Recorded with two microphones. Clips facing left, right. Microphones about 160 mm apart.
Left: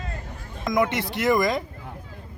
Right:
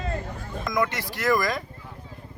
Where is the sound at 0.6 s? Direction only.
20° left (ahead or behind).